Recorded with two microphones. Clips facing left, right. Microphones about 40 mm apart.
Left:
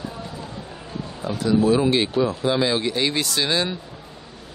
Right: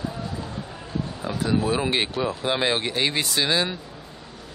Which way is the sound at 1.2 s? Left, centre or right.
Right.